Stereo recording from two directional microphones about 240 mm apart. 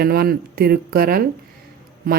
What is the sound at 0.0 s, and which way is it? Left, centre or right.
Speech, right.